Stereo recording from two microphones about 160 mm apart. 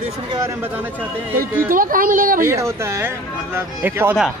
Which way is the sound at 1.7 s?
60° right (ahead or behind).